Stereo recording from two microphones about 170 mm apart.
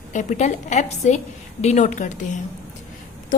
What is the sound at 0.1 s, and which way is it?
A woman's voice, 45° left (ahead or behind).